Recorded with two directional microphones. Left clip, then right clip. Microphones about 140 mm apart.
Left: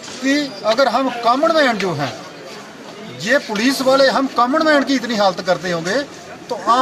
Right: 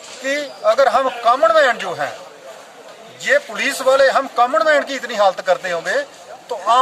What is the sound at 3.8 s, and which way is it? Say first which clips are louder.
Speech: right 1 dB; 5° right (ahead or behind).